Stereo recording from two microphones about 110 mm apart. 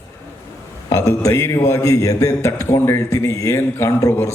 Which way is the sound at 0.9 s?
30° left (ahead or behind).